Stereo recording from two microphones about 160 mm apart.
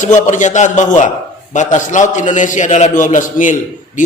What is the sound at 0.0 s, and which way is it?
A man's voice, 50° left (ahead or behind).